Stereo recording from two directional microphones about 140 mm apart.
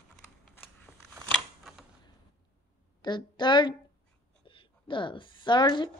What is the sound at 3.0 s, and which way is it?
A woman's voice, 30° left (ahead or behind).